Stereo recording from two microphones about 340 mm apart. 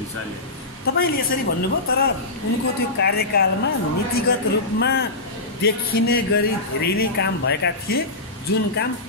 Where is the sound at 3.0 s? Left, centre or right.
Left.